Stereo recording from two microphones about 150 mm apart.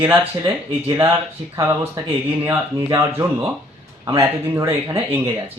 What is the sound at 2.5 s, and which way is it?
Speech, 20° right (ahead or behind).